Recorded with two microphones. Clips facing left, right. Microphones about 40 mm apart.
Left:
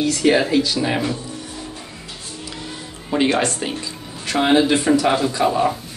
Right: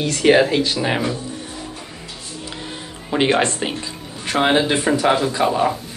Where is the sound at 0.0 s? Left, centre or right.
Right.